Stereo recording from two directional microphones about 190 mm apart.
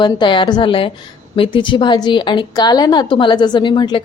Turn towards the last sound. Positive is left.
turn(degrees=25)  # may be behind; listen again after turning